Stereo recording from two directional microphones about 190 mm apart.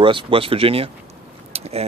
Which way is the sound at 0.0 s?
25° right (ahead or behind).